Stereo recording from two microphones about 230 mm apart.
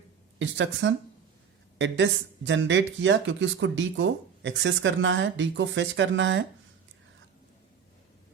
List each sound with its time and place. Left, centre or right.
0.3 s speech: right
2.5 s speech: right